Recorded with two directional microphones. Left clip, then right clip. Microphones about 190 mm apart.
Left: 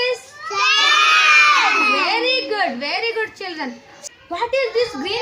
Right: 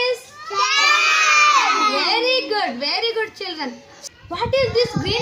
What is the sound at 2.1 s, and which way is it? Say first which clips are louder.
A child's voice: even; 10° left (ahead or behind).